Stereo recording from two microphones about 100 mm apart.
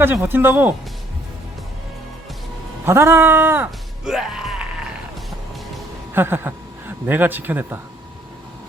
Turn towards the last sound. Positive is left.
turn(degrees=-20)  # may be behind; listen again after turning